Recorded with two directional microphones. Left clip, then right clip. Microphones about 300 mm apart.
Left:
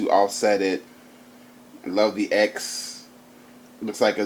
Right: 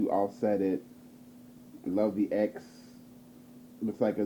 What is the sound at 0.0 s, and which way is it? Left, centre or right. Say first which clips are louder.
Speech: left 10 dB; centre.